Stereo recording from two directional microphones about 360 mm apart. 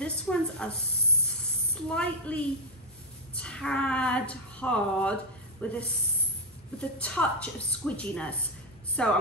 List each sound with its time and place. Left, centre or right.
0.0 s a sound: centre
1.9 s a woman's voice: centre
7.0 s a woman's voice: centre